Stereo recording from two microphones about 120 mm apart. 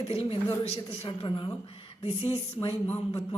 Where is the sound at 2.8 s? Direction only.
15° left (ahead or behind).